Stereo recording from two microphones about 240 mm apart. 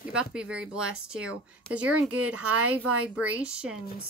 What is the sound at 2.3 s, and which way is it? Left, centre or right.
Speech, right.